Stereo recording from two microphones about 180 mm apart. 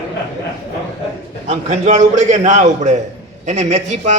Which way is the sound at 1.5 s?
40° right (ahead or behind).